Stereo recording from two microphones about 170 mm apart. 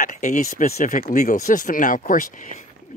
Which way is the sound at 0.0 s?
50° left (ahead or behind).